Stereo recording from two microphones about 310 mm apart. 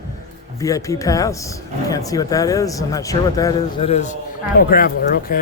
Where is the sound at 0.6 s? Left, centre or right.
Centre.